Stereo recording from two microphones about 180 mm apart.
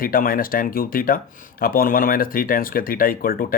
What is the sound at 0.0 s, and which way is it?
Speech, 55° left (ahead or behind).